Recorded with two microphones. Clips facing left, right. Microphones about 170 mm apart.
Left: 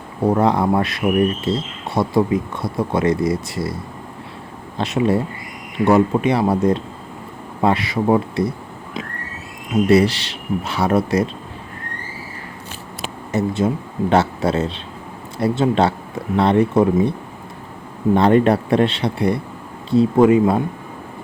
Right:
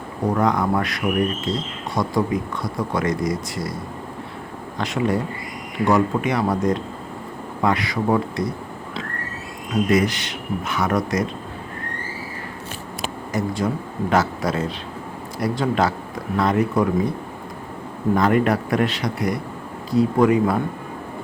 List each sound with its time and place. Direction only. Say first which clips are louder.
0.3 s speech: left 4 dB; 30° left (ahead or behind)
4.8 s speech: left 4 dB; 25° left (ahead or behind)
9.9 s speech: left 6 dB; 30° left (ahead or behind)
13.3 s speech: left 4 dB; 25° left (ahead or behind)